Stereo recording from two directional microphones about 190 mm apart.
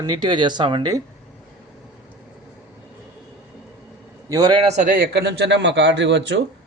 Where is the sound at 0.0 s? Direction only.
25° right (ahead or behind).